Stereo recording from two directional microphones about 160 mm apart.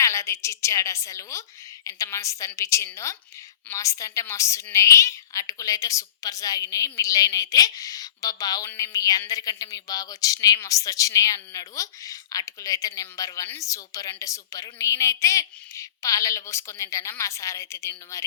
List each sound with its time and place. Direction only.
0.0 s a woman's voice: 20° left (ahead or behind)